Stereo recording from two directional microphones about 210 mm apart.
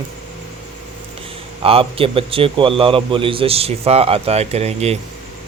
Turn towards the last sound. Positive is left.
turn(degrees=-30)  # may be behind; listen again after turning